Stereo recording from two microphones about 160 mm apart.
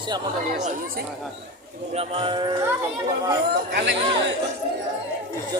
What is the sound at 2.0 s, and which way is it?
Speech, 35° right (ahead or behind).